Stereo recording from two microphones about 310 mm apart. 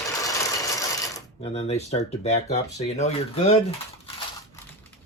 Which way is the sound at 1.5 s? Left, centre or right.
Centre.